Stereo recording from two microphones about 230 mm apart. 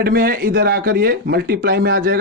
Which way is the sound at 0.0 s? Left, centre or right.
Right.